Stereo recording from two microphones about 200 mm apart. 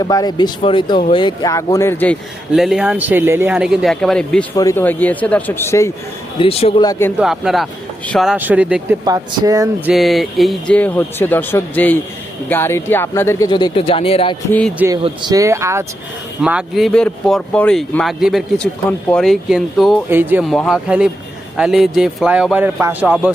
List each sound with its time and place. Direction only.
0.0 s speech: 20° left (ahead or behind)
2.6 s speech: 5° right (ahead or behind)
4.5 s a man's voice: 15° left (ahead or behind)
6.4 s speech: 30° left (ahead or behind)
7.2 s speech: centre (ahead or behind)
9.0 s speech: 20° right (ahead or behind)
9.9 s a man's voice: centre (ahead or behind)
13.5 s speech: 20° left (ahead or behind)
15.0 s speech: 20° right (ahead or behind)